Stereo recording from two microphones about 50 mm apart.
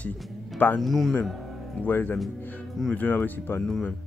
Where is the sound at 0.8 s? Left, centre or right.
Centre.